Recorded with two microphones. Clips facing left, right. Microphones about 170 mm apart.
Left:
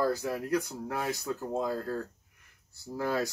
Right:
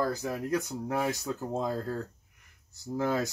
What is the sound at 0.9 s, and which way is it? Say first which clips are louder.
Speech: right 3 dB; 20° right (ahead or behind).